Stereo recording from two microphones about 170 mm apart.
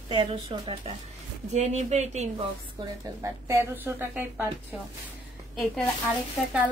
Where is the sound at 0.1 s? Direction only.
35° right (ahead or behind).